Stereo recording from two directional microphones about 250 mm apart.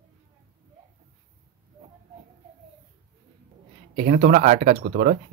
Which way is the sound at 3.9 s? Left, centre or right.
Right.